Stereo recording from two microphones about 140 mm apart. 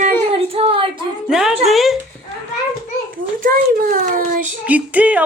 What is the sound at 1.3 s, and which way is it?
Speech, 5° right (ahead or behind).